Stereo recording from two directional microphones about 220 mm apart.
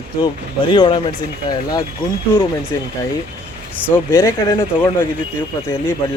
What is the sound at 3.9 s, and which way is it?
Speech, 15° left (ahead or behind).